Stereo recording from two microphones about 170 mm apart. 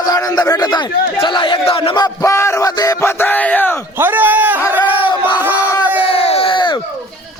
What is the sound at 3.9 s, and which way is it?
Speech, 10° right (ahead or behind).